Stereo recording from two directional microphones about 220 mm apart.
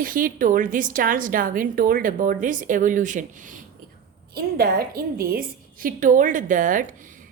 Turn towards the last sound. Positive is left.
turn(degrees=-35)  # may be behind; listen again after turning